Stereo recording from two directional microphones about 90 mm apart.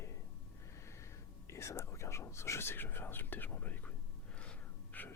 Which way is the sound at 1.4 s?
30° left (ahead or behind).